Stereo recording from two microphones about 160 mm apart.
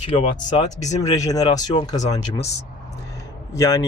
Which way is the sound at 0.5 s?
45° left (ahead or behind).